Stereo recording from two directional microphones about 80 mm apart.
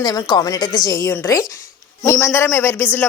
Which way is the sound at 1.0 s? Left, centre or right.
Left.